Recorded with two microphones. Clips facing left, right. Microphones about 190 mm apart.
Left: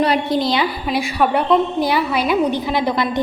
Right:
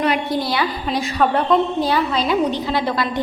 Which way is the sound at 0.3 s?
20° left (ahead or behind).